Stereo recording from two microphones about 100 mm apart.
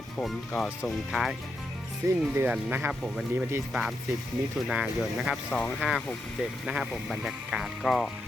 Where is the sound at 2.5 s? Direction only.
15° right (ahead or behind).